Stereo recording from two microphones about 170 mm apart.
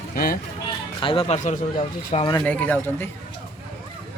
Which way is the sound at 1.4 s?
45° left (ahead or behind).